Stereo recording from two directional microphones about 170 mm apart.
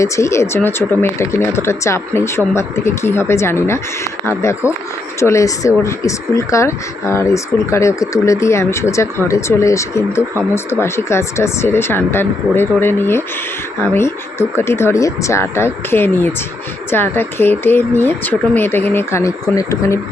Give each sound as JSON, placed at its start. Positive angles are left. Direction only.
{"t": 0.0, "sound": "speech", "side_deg": 15}